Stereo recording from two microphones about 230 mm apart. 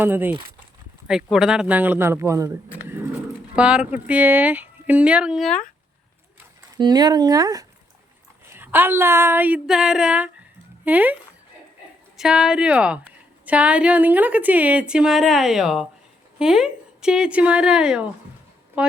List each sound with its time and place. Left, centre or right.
0.0 s a woman's voice: centre
6.7 s a woman's voice: centre